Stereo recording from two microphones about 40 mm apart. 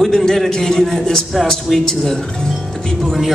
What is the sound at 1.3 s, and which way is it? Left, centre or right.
Speech, centre.